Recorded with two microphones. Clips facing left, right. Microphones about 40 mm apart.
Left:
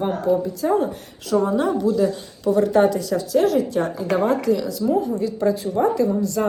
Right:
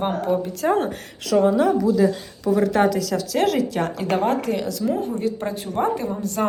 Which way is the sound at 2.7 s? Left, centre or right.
Right.